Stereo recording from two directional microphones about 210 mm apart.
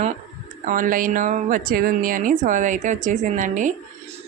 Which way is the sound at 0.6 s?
40° right (ahead or behind).